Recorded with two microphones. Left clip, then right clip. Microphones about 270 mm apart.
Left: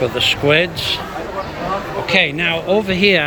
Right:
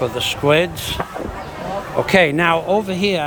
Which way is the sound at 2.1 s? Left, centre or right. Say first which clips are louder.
Right 1 dB; centre.